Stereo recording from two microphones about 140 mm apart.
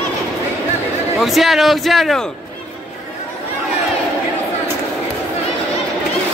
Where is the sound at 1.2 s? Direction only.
Centre (ahead or behind).